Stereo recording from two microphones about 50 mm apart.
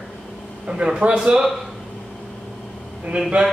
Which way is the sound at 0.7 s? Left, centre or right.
Centre.